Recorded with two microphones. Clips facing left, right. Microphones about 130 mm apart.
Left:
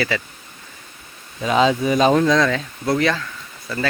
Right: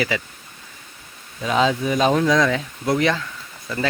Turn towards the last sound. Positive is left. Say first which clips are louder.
# even
turn(degrees=-20)  # may be behind; listen again after turning